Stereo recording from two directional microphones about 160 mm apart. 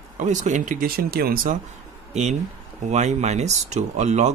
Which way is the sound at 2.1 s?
45° right (ahead or behind).